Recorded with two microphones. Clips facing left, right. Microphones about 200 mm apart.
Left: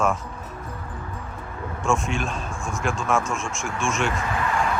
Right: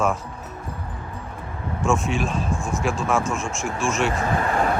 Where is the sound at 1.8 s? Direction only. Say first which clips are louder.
Right 2 dB; centre (ahead or behind).